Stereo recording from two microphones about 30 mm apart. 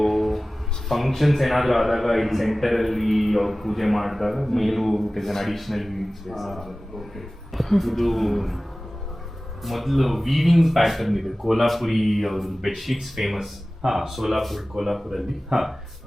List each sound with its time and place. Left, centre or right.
0.0 s music: centre
0.9 s a man's voice: centre
9.6 s a man's voice: centre
15.5 s speech: right